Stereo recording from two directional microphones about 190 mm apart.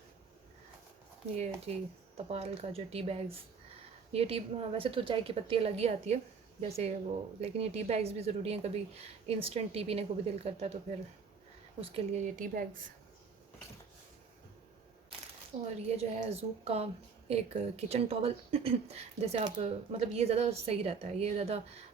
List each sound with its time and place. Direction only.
1.6 s a woman's voice: 35° right (ahead or behind)
11.8 s a woman's voice: 35° right (ahead or behind)
15.9 s a woman's voice: 35° right (ahead or behind)